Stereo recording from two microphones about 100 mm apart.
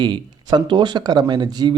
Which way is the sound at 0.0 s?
50° right (ahead or behind).